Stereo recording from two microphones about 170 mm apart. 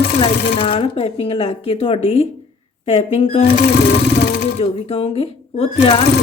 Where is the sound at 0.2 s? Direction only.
30° left (ahead or behind).